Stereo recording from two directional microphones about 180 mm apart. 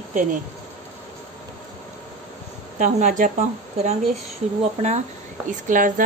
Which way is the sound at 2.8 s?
45° right (ahead or behind).